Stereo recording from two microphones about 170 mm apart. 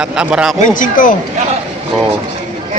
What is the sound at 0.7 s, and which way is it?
Speech, 50° left (ahead or behind).